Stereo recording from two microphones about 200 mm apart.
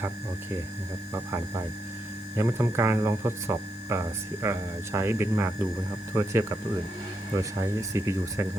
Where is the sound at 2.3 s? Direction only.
15° right (ahead or behind).